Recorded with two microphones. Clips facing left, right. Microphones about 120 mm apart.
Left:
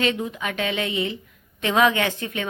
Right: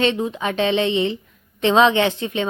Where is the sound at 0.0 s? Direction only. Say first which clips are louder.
Right 4 dB; 25° right (ahead or behind).